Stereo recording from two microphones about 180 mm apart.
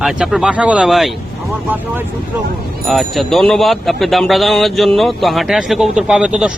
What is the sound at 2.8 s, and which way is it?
Speech, centre (ahead or behind).